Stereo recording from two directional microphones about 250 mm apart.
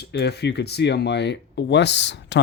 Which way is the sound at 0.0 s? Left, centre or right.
Left.